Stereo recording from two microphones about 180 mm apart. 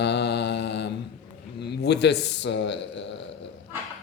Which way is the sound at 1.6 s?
70° left (ahead or behind).